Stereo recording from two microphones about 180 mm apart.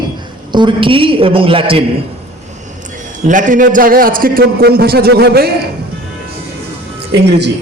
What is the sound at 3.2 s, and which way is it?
A man's voice, 45° right (ahead or behind).